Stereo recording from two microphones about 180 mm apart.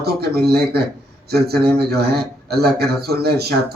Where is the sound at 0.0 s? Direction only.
60° right (ahead or behind).